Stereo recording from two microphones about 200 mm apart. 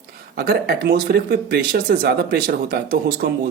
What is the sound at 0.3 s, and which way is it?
Speech, 50° right (ahead or behind).